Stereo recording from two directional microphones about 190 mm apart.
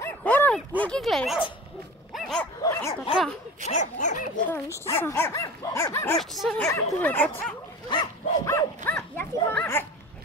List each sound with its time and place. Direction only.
0.0 s dog: 10° left (ahead or behind)
2.6 s speech: 20° left (ahead or behind)
3.6 s speech: 40° left (ahead or behind)
4.8 s dog: 10° left (ahead or behind)
6.3 s speech: centre (ahead or behind)
6.7 s dog: 10° left (ahead or behind)
7.9 s dog: 20° left (ahead or behind)